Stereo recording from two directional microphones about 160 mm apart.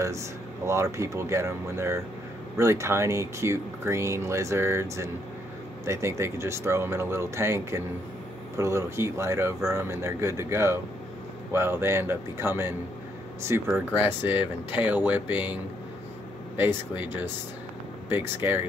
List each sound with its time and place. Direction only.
0.7 s speech: 15° right (ahead or behind)